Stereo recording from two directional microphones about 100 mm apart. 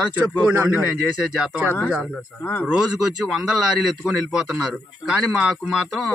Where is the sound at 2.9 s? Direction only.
5° right (ahead or behind).